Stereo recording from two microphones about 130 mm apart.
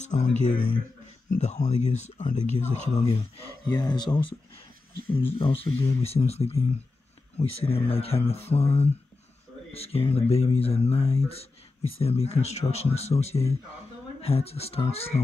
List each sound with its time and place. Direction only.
0.0 s speech: 65° left (ahead or behind)
3.7 s speech: 35° left (ahead or behind)
5.1 s speech: 45° left (ahead or behind)